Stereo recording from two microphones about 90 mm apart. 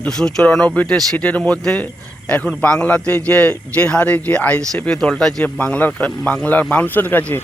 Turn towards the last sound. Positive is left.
turn(degrees=20)  # may be behind; listen again after turning